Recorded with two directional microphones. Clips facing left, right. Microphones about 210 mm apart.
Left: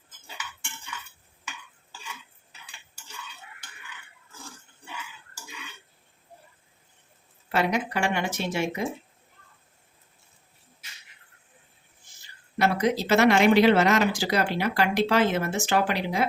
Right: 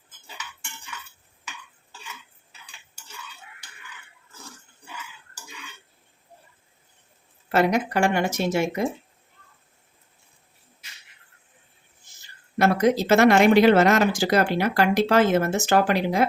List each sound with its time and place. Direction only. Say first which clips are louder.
7.5 s speech: right 5 dB; 45° right (ahead or behind)
12.5 s speech: right 4 dB; 45° right (ahead or behind)